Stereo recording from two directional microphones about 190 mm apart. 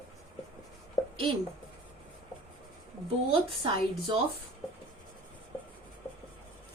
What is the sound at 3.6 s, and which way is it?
Speech, 25° right (ahead or behind).